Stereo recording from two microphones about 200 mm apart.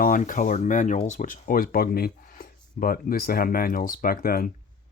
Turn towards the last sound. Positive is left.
turn(degrees=45)  # may be behind; listen again after turning